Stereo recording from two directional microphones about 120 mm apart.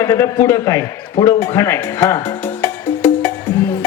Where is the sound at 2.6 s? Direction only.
20° left (ahead or behind).